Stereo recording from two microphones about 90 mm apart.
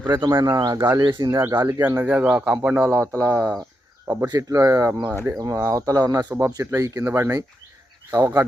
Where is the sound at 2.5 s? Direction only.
25° right (ahead or behind).